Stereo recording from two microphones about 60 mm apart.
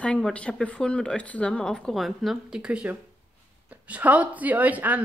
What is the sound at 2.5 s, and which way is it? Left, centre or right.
Speech, centre.